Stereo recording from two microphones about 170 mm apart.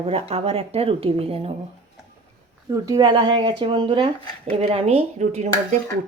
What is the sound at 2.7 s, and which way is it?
Speech, 20° right (ahead or behind).